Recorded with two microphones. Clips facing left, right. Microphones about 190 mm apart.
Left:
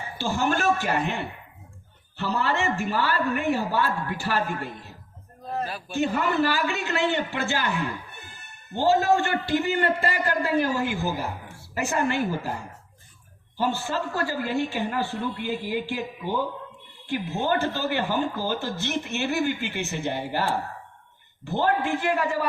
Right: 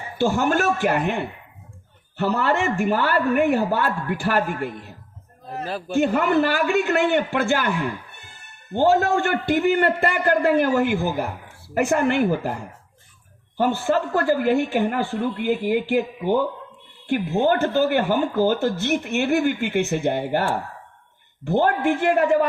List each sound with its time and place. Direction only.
0.2 s a man's voice: 50° right (ahead or behind)
5.9 s a man's voice: 55° right (ahead or behind)
8.7 s a man's voice: 50° right (ahead or behind)
13.6 s a man's voice: 55° right (ahead or behind)